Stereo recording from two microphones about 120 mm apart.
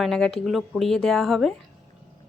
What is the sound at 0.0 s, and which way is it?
Speech, 5° left (ahead or behind).